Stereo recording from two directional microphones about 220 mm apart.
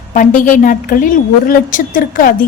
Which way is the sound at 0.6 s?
40° left (ahead or behind).